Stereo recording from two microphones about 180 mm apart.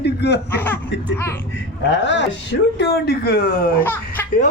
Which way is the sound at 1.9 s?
85° left.